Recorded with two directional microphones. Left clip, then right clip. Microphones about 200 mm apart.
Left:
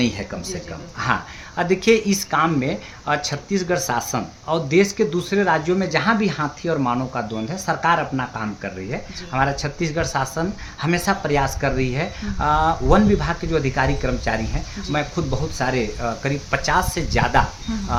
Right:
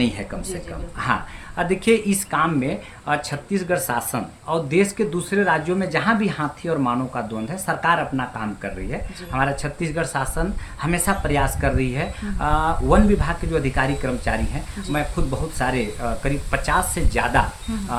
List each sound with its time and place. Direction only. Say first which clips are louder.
0.9 s speech: left 1 dB; 20° left (ahead or behind)